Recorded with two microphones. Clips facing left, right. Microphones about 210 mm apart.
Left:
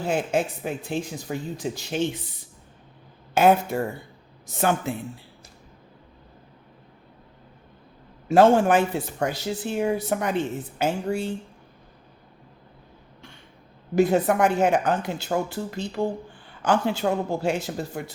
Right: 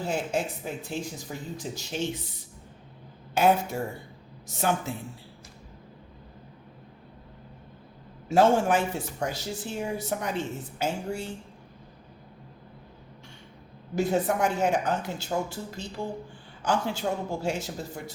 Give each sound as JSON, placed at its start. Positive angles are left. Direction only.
{"t": 0.1, "sound": "speech", "side_deg": 65}
{"t": 3.3, "sound": "speech", "side_deg": 60}
{"t": 8.3, "sound": "speech", "side_deg": 60}
{"t": 13.9, "sound": "speech", "side_deg": 60}